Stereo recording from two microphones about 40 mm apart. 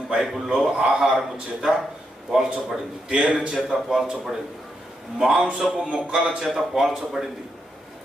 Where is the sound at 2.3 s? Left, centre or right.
Centre.